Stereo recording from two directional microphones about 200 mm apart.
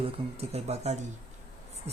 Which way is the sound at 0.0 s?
30° right (ahead or behind).